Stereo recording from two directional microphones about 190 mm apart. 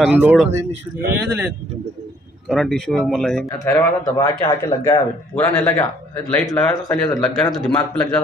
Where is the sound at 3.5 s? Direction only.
15° left (ahead or behind).